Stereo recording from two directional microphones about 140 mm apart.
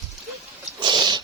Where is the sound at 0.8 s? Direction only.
35° right (ahead or behind).